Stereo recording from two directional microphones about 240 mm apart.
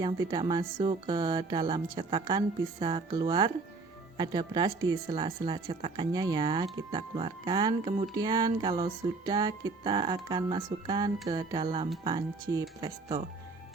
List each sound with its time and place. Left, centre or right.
0.0 s speech: centre
11.3 s music: centre
12.0 s speech: centre